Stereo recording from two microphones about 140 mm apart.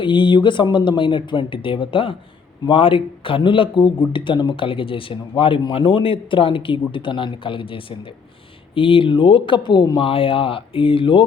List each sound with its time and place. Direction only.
0.0 s speech: 35° left (ahead or behind)